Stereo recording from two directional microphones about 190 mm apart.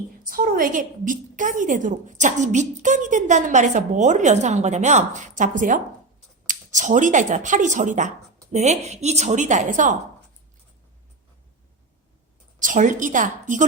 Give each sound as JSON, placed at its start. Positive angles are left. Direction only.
{"t": 0.3, "sound": "a woman's voice", "side_deg": -50}
{"t": 12.5, "sound": "a woman's voice", "side_deg": -45}